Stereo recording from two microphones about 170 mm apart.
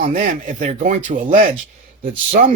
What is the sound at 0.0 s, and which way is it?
Speech, 50° right (ahead or behind).